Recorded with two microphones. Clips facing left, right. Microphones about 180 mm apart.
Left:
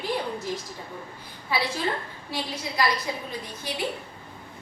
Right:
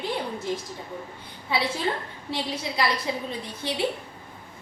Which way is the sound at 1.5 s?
20° right (ahead or behind).